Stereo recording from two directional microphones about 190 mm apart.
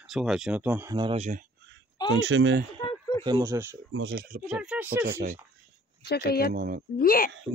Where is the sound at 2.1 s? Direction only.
75° right (ahead or behind).